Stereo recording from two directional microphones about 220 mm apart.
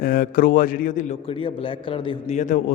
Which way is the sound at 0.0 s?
40° left (ahead or behind).